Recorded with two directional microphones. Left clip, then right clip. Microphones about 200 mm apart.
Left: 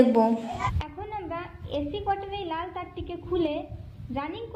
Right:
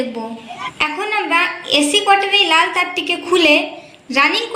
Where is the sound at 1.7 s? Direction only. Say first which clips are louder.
Right 15 dB; 40° left (ahead or behind).